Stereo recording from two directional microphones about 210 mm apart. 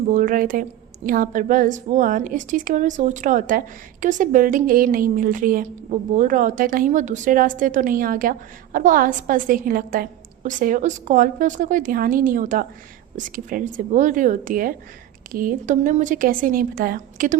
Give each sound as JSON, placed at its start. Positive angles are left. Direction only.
{"t": 0.1, "sound": "a woman's voice", "side_deg": -40}